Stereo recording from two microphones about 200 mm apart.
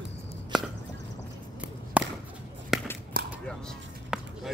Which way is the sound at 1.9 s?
5° right (ahead or behind).